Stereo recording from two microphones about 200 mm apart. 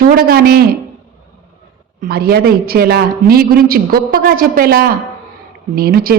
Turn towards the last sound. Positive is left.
turn(degrees=-50)  # may be behind; listen again after turning